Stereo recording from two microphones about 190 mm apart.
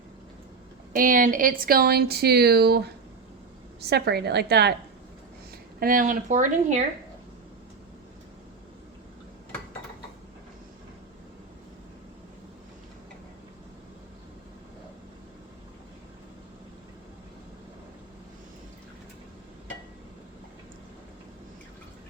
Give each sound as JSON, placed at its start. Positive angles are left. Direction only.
{"t": 0.9, "sound": "speech", "side_deg": -45}
{"t": 5.8, "sound": "speech", "side_deg": -45}